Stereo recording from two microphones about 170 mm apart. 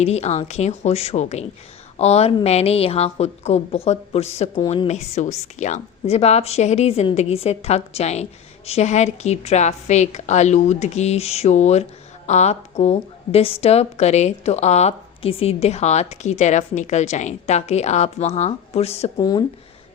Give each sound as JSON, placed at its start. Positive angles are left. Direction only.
{"t": 0.0, "sound": "a woman's voice", "side_deg": 40}
{"t": 19.2, "sound": "speech", "side_deg": 25}